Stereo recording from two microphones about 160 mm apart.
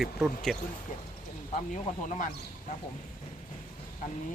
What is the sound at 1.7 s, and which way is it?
Speech, 50° left (ahead or behind).